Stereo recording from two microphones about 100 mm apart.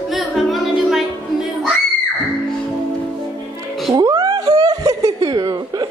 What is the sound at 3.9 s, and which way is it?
Chuckle, 40° right (ahead or behind).